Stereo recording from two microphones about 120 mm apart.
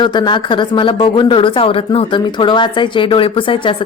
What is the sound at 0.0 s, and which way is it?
A woman's voice, 40° left (ahead or behind).